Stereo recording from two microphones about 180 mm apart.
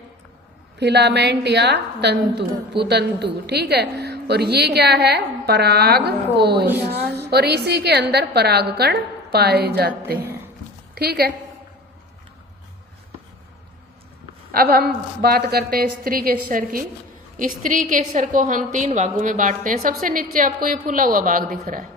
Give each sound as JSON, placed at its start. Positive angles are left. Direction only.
{"t": 0.8, "sound": "a woman's voice", "side_deg": -70}
{"t": 10.9, "sound": "a woman's voice", "side_deg": -60}
{"t": 14.5, "sound": "a woman's voice", "side_deg": -60}